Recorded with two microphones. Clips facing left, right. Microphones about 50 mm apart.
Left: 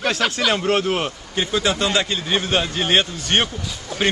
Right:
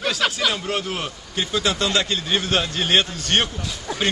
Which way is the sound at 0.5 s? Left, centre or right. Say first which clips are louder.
Left 6 dB; left.